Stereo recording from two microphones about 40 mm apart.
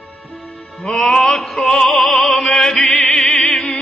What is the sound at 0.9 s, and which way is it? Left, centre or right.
Music, centre.